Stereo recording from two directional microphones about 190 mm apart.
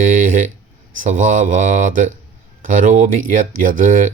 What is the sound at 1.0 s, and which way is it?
Speech, 40° right (ahead or behind).